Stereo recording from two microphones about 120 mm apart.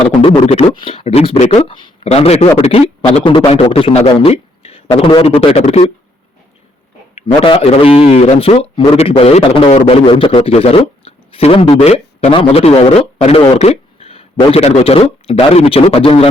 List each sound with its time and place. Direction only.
0.2 s a man's voice: 55° left (ahead or behind)
7.2 s a man's voice: 50° left (ahead or behind)